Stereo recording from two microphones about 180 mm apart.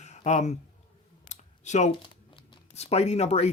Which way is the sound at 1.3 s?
40° left (ahead or behind).